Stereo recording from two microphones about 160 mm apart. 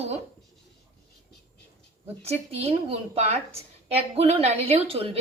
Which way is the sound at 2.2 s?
40° right (ahead or behind).